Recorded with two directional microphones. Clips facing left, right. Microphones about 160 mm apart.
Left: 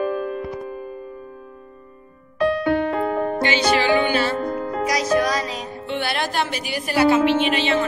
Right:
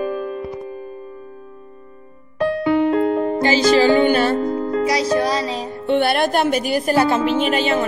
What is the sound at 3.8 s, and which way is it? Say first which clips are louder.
Music: right 5 dB; 45° right (ahead or behind).